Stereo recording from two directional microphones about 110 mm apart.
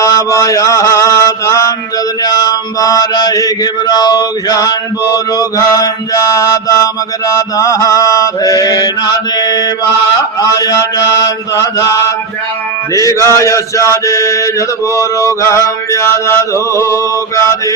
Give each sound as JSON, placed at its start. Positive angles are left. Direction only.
{"t": 0.0, "sound": "mantra", "side_deg": 30}